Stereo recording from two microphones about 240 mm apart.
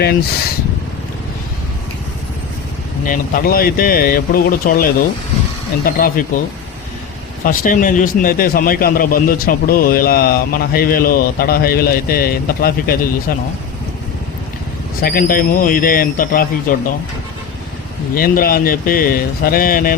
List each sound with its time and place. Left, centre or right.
3.1 s speech: left
7.4 s speech: left
15.0 s speech: left
18.1 s speech: left